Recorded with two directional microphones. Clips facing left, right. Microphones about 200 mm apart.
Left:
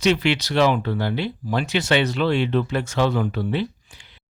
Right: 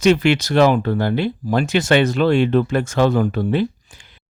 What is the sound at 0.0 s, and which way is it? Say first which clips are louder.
Speech: right 5 dB; 50° right (ahead or behind).